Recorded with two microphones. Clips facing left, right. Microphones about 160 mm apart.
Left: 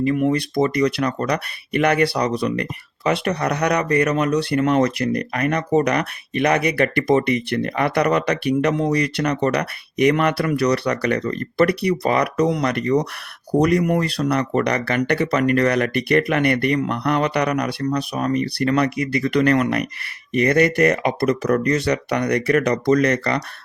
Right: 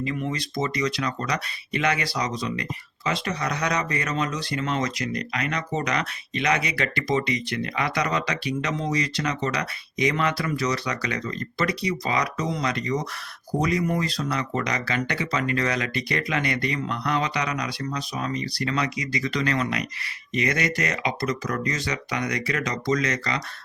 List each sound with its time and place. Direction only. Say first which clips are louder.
0.1 s speech: left 10 dB; 55° left (ahead or behind)